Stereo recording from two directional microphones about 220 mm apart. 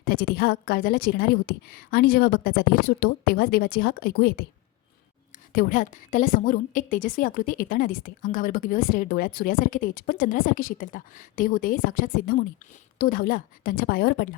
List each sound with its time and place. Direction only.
0.0 s a woman's voice: 40° left (ahead or behind)
5.5 s a woman's voice: 40° left (ahead or behind)